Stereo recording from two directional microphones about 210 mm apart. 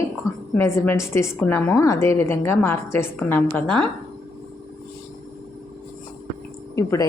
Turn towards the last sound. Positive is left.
turn(degrees=15)  # may be behind; listen again after turning